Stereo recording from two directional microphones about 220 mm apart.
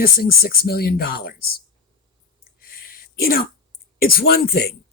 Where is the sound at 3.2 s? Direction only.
40° left (ahead or behind).